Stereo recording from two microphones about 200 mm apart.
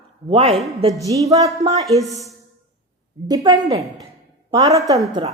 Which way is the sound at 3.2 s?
20° right (ahead or behind).